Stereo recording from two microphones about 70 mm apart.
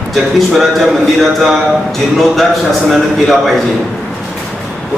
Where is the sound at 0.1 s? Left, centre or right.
Centre.